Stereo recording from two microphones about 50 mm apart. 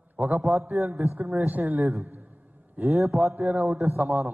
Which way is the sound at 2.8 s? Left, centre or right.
Right.